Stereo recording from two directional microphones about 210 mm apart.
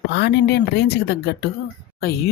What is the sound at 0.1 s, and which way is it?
Speech, 50° left (ahead or behind).